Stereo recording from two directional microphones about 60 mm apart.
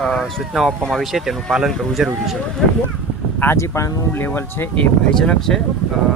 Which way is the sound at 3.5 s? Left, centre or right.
Left.